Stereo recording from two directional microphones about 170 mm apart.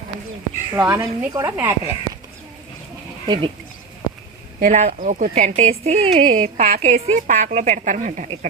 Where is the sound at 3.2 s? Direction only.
25° right (ahead or behind).